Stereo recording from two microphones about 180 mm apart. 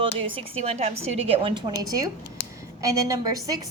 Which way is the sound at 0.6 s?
35° right (ahead or behind).